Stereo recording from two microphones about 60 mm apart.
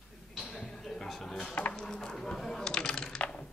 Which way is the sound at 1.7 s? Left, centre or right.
Centre.